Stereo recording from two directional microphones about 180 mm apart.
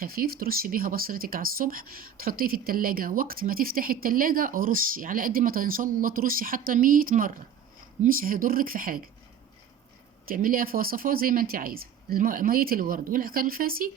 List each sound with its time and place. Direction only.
0.0 s speech: 55° right (ahead or behind)
10.2 s speech: 50° right (ahead or behind)